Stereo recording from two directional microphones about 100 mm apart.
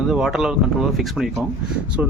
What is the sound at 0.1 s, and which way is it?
Speech, 5° right (ahead or behind).